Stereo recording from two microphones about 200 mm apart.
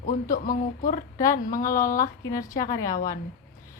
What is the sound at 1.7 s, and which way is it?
A woman's voice, 15° left (ahead or behind).